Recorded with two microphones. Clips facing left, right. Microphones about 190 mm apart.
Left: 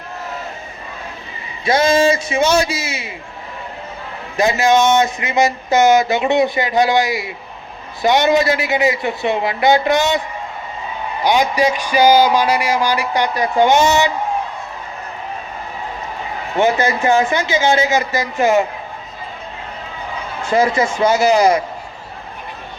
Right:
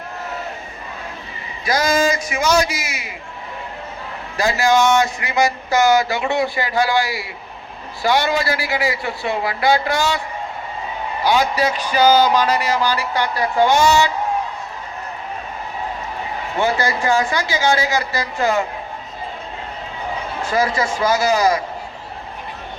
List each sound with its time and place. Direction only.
1.6 s speech: 25° left (ahead or behind)
4.4 s speech: 20° left (ahead or behind)
11.2 s a man's voice: 15° left (ahead or behind)
16.6 s speech: 20° left (ahead or behind)
20.4 s speech: 25° left (ahead or behind)